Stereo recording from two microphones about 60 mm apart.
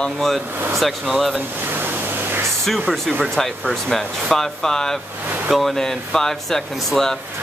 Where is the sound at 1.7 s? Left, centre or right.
Right.